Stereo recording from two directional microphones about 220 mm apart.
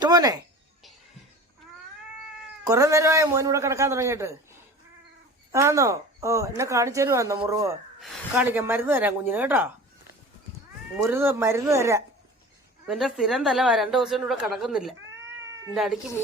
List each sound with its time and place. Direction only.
0.0 s a sound: 15° right (ahead or behind)
2.6 s a man's voice: 15° right (ahead or behind)
5.5 s a man's voice: 10° right (ahead or behind)
10.9 s a man's voice: 10° right (ahead or behind)